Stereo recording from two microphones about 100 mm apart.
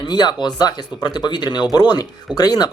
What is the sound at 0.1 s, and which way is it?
Speech, 45° left (ahead or behind).